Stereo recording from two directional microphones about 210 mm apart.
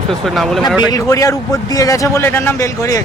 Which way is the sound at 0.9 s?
15° left (ahead or behind).